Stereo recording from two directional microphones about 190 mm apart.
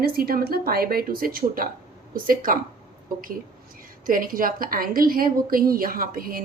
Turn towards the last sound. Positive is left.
turn(degrees=-50)  # may be behind; listen again after turning